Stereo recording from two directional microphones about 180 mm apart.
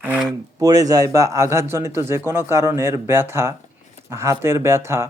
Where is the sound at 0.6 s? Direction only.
20° right (ahead or behind).